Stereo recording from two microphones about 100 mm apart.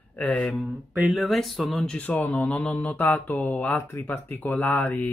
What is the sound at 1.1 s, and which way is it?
Speech, centre (ahead or behind).